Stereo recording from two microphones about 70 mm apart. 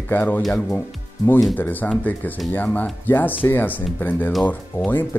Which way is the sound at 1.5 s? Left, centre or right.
Left.